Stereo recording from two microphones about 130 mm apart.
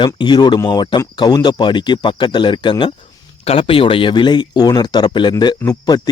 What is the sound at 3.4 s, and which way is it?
Speech, 50° left (ahead or behind).